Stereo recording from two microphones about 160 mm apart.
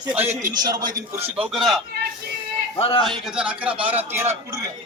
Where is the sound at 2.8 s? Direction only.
35° left (ahead or behind).